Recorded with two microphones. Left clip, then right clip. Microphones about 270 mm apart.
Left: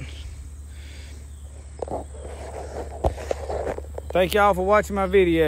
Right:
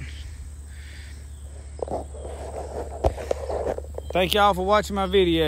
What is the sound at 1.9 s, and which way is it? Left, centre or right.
Walk, left.